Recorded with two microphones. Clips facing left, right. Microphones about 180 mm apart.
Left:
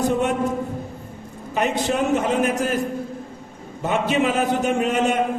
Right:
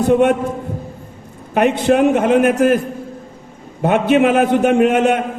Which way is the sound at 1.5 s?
60° right (ahead or behind).